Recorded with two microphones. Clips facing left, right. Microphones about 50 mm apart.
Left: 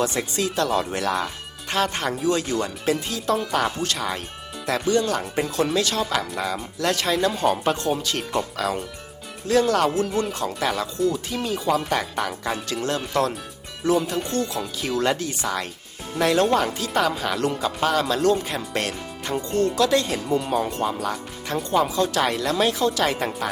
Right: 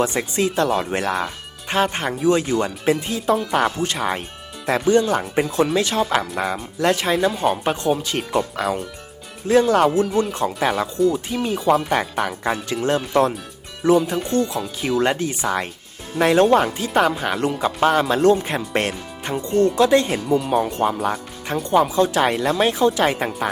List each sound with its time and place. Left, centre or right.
0.0 s speech: right
9.5 s speech: right
20.2 s speech: centre
20.5 s speech: centre
20.7 s speech: right